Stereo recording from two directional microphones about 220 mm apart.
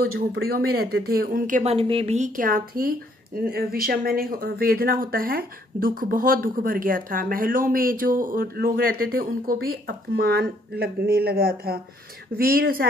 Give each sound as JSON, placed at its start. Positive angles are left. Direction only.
{"t": 0.3, "sound": "speech", "side_deg": -45}